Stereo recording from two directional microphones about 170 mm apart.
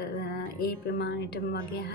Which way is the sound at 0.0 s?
70° left (ahead or behind).